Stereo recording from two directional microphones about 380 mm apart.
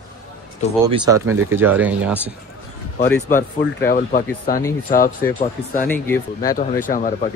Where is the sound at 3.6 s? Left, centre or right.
Left.